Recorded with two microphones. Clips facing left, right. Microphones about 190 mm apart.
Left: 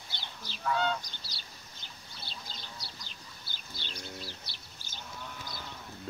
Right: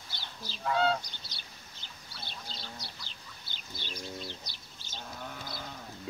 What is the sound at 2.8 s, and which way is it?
Duck, 20° right (ahead or behind).